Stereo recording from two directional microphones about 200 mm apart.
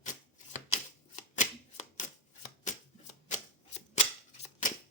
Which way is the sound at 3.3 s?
35° left (ahead or behind).